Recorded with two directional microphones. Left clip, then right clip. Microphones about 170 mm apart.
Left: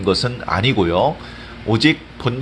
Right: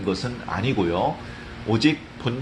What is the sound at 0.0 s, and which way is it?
Speech, 50° left (ahead or behind).